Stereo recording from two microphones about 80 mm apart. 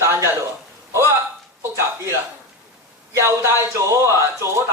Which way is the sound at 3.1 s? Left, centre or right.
Right.